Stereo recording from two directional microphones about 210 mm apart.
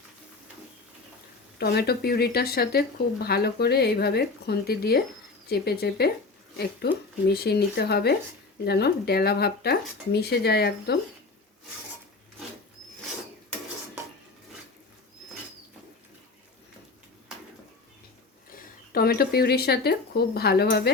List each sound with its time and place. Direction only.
1.5 s speech: 50° left (ahead or behind)
18.5 s speech: 45° left (ahead or behind)